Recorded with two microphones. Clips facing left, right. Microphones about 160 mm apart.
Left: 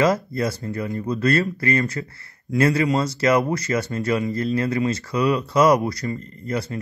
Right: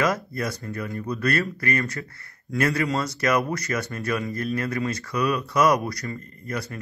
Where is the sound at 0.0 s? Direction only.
25° left (ahead or behind).